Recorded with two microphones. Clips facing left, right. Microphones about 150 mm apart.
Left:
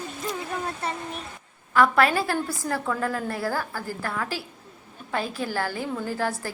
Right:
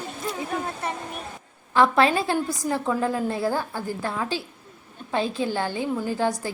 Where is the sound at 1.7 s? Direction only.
25° right (ahead or behind).